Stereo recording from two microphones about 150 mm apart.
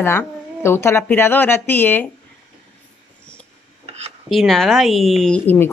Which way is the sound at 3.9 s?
45° right (ahead or behind).